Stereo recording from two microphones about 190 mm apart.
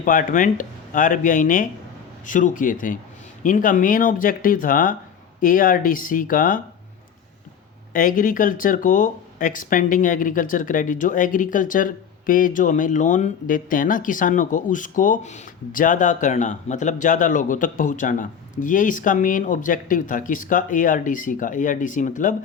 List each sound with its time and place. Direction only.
0.0 s speech: 45° left (ahead or behind)
7.9 s speech: 45° left (ahead or behind)